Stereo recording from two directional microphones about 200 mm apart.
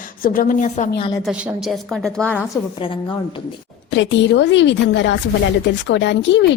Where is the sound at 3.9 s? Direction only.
65° left (ahead or behind).